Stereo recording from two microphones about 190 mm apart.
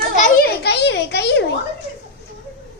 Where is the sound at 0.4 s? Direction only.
60° left (ahead or behind).